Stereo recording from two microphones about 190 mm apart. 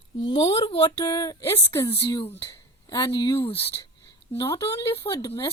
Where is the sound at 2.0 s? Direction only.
30° left (ahead or behind).